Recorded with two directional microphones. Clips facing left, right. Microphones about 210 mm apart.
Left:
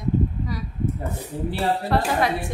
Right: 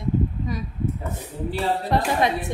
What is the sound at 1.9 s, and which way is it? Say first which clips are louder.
Speech: right 2 dB; 20° right (ahead or behind).